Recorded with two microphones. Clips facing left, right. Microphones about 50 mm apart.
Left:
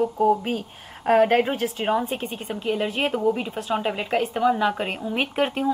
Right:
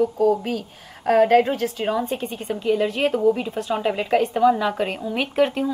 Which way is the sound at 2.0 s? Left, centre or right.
Centre.